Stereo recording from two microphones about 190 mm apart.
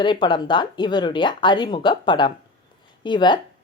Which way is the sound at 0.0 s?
25° left (ahead or behind).